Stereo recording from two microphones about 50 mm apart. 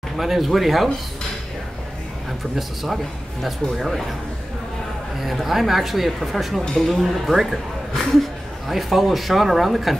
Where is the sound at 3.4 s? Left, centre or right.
Centre.